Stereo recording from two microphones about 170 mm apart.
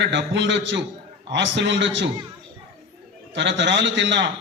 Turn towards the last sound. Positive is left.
turn(degrees=-90)